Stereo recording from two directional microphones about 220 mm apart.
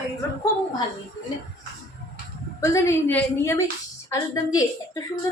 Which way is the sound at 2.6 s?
10° left (ahead or behind).